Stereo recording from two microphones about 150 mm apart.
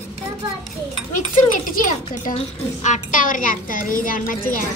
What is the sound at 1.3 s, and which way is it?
A woman's voice, 60° left (ahead or behind).